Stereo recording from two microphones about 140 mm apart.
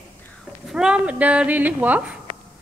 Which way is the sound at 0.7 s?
5° right (ahead or behind).